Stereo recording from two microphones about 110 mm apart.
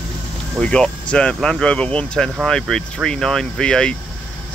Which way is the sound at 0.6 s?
10° left (ahead or behind).